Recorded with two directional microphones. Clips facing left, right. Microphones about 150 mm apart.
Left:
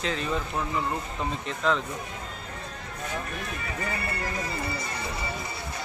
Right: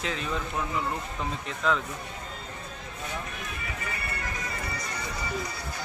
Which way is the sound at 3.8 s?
30° left (ahead or behind).